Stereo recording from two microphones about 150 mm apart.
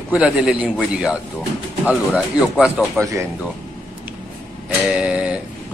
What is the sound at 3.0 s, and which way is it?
Speech, 20° right (ahead or behind).